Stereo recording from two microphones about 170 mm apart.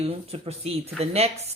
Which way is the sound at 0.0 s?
35° right (ahead or behind).